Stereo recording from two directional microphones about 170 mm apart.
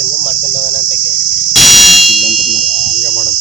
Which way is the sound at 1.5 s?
Centre (ahead or behind).